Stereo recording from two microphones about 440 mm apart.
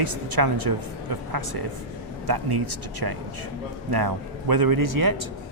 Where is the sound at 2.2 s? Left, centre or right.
Right.